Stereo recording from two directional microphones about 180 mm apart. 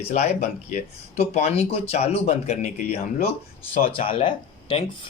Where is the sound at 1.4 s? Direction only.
35° left (ahead or behind).